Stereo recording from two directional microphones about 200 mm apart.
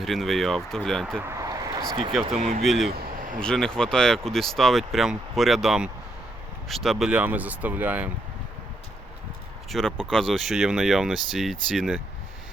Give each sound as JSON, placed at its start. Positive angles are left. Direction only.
{"t": 0.0, "sound": "speech", "side_deg": 0}
{"t": 1.1, "sound": "a sound", "side_deg": -10}
{"t": 2.6, "sound": "speech", "side_deg": 0}
{"t": 2.9, "sound": "vehicle", "side_deg": -40}
{"t": 3.4, "sound": "speech", "side_deg": 5}
{"t": 9.6, "sound": "speech", "side_deg": 0}